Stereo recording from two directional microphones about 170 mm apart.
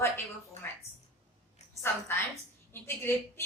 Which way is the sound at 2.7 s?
15° left (ahead or behind).